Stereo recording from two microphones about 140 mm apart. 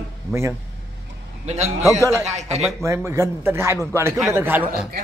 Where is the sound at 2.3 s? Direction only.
50° right (ahead or behind).